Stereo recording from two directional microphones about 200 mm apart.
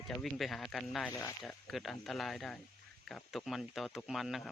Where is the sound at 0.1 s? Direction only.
Centre (ahead or behind).